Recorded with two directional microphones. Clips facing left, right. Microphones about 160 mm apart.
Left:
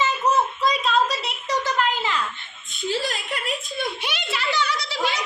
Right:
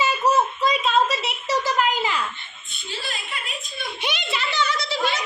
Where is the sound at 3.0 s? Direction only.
80° left.